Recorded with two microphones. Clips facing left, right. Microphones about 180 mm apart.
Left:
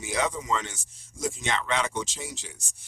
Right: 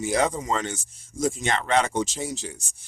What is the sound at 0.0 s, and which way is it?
Speech, 45° right (ahead or behind).